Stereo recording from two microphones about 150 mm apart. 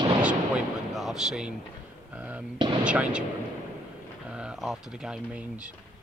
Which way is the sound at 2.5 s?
30° right (ahead or behind).